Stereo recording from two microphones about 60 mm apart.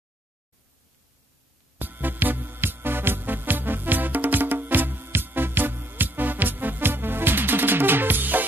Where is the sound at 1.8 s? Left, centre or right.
Right.